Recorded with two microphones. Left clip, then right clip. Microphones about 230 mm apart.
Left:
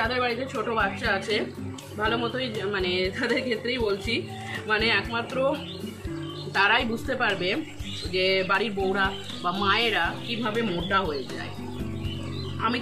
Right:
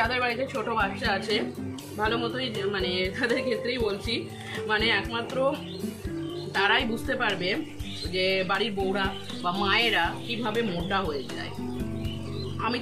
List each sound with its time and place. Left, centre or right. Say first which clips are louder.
0.0 s a woman's voice: even; centre
6.5 s speech: left 2 dB; centre
10.4 s a woman's voice: left 1 dB; centre